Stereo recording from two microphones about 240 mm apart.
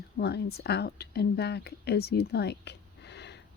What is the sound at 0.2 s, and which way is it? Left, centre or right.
Speech, left.